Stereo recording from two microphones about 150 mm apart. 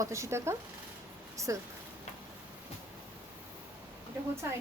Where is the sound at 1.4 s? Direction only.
20° right (ahead or behind).